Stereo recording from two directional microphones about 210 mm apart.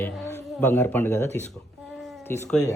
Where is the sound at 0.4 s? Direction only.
10° left (ahead or behind).